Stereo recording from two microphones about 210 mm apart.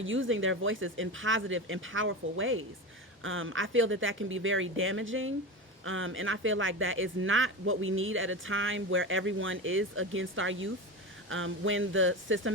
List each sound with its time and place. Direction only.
0.0 s speech: 65° right (ahead or behind)